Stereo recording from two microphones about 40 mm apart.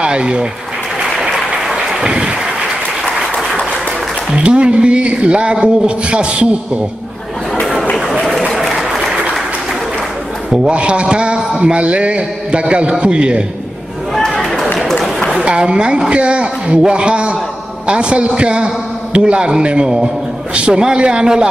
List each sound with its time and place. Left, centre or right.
0.0 s speech: right
1.2 s applause: centre
2.0 s a sound: right
3.0 s applause: centre
4.4 s a man's voice: right
8.7 s applause: centre
10.7 s a man's voice: right
14.1 s a sound: centre
15.3 s a man's voice: right